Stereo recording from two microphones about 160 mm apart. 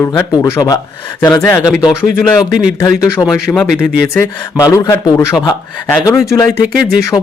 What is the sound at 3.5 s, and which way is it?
Speech, 5° left (ahead or behind).